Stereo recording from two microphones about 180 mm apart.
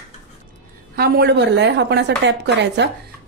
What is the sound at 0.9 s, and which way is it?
A woman's voice, 60° right (ahead or behind).